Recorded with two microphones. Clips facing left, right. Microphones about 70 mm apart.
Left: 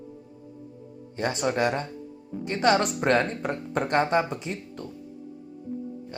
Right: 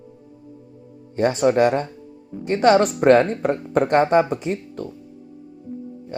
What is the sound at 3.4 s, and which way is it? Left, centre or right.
Speech, right.